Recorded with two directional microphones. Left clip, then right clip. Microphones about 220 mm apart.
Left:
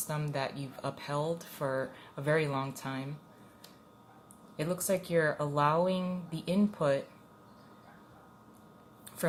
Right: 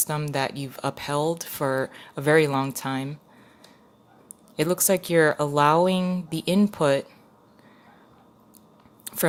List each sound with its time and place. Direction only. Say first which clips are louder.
0.1 s speech: right 7 dB; 45° right (ahead or behind)
4.5 s speech: right 9 dB; 50° right (ahead or behind)